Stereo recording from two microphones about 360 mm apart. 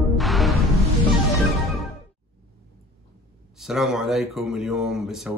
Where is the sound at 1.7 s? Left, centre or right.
Centre.